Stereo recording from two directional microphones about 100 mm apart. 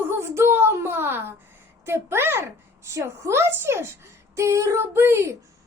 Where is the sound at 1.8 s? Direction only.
25° right (ahead or behind).